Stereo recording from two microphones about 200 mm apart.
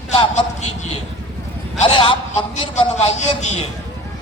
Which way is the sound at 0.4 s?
25° left (ahead or behind).